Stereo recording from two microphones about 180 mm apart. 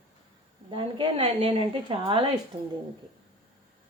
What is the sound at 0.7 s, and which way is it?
A woman's voice, 25° right (ahead or behind).